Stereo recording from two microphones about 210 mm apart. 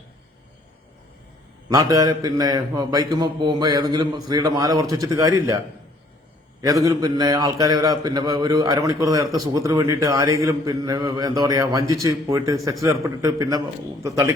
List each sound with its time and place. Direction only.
1.7 s a man's voice: 15° right (ahead or behind)
6.6 s a man's voice: 15° right (ahead or behind)